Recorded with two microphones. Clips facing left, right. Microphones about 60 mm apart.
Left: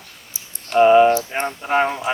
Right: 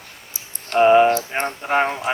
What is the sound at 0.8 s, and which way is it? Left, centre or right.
Speech, centre.